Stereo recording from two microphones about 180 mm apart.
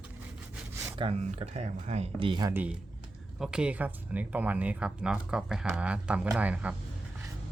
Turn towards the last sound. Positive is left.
turn(degrees=-10)  # may be behind; listen again after turning